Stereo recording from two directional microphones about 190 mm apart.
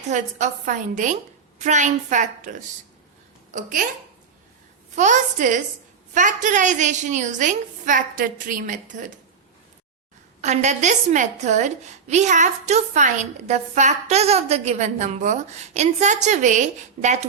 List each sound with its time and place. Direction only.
0.1 s a woman's voice: 40° right (ahead or behind)
4.9 s a woman's voice: 40° right (ahead or behind)
10.4 s a woman's voice: 40° right (ahead or behind)